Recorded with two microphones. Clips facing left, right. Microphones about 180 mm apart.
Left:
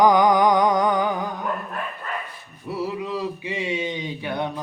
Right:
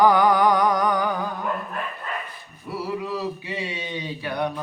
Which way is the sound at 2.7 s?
20° left (ahead or behind).